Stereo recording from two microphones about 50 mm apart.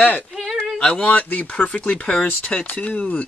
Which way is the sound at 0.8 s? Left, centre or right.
Centre.